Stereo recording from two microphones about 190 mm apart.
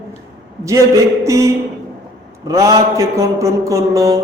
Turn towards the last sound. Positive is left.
turn(degrees=-15)  # may be behind; listen again after turning